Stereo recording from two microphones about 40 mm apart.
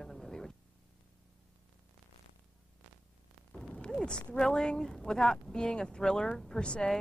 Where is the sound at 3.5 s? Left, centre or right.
Left.